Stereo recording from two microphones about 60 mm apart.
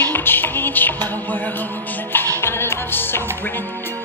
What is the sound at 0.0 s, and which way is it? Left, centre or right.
Music, left.